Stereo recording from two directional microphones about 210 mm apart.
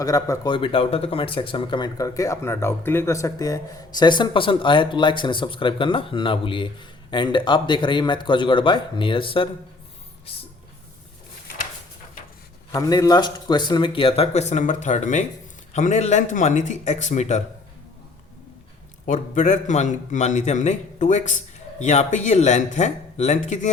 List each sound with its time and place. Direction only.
0.0 s speech: 15° left (ahead or behind)
12.7 s a man's voice: 15° left (ahead or behind); by 17.4 s 35° left (ahead or behind)
19.0 s a man's voice: 35° left (ahead or behind)